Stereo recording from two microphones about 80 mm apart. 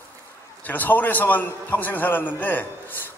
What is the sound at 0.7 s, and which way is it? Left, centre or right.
A man's voice, left.